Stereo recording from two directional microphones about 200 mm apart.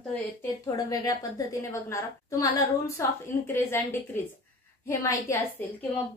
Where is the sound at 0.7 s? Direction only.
20° left (ahead or behind).